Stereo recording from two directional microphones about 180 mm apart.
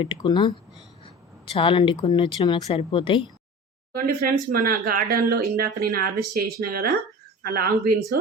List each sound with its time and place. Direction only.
0.0 s speech: 25° left (ahead or behind)
1.5 s speech: 30° left (ahead or behind)
3.9 s speech: 55° right (ahead or behind)